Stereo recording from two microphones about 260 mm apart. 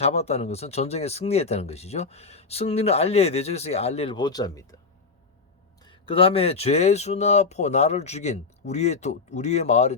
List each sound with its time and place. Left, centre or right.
0.0 s speech: left
5.8 s speech: centre